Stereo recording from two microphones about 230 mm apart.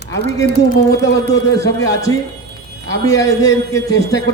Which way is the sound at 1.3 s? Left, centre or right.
Centre.